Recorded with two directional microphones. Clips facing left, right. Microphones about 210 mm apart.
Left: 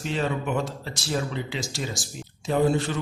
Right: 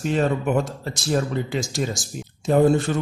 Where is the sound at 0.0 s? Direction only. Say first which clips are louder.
Right 6 dB; 45° right (ahead or behind).